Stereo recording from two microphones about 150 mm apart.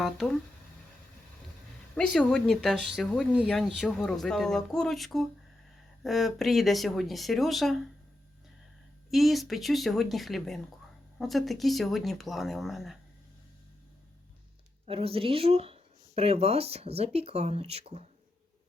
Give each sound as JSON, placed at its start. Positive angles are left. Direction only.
{"t": 2.0, "sound": "speech", "side_deg": 5}
{"t": 9.0, "sound": "speech", "side_deg": 0}
{"t": 14.8, "sound": "speech", "side_deg": -40}